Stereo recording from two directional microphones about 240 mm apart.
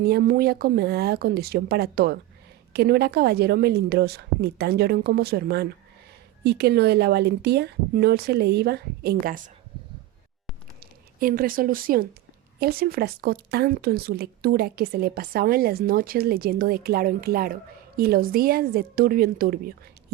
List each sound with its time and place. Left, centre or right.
0.0 s speech: right
10.8 s speech: right